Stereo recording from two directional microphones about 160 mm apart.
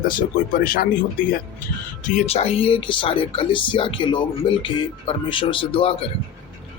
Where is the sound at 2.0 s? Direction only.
45° left (ahead or behind).